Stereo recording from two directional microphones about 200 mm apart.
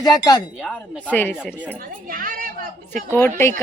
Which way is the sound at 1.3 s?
5° right (ahead or behind).